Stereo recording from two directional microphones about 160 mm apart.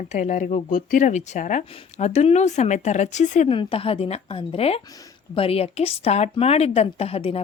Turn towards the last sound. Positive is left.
turn(degrees=40)  # may be behind; listen again after turning